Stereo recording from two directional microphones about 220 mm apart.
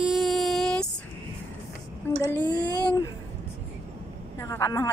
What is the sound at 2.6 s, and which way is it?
Speech, 20° left (ahead or behind).